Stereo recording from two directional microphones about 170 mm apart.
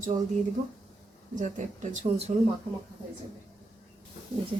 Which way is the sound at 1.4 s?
45° right (ahead or behind).